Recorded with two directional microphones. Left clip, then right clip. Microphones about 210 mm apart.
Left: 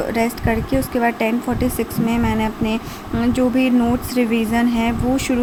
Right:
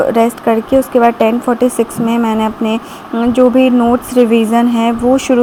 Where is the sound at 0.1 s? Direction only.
20° right (ahead or behind).